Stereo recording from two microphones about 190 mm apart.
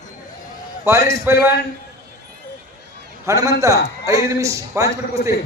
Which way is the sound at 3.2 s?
15° right (ahead or behind).